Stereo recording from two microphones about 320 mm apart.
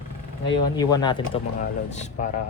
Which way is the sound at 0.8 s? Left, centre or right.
Centre.